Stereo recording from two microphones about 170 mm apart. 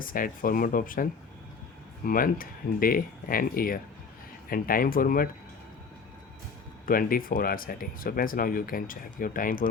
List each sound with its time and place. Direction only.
0.0 s speech: 55° left (ahead or behind)
2.0 s speech: 55° left (ahead or behind)
6.8 s speech: 55° left (ahead or behind)